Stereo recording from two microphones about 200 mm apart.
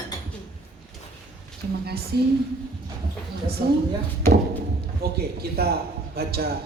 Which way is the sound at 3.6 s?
40° right (ahead or behind).